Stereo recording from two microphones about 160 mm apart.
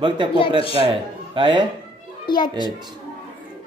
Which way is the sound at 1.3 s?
30° right (ahead or behind).